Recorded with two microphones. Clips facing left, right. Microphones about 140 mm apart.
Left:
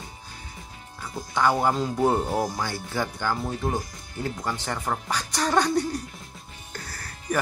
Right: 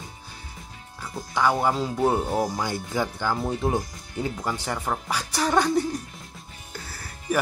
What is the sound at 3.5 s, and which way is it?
Speech, 20° right (ahead or behind).